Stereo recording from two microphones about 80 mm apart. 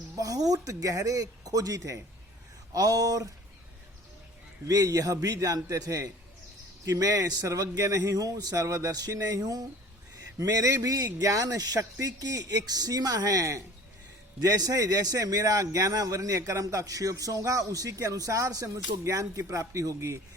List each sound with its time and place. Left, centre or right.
0.2 s a man's voice: right
4.6 s a man's voice: right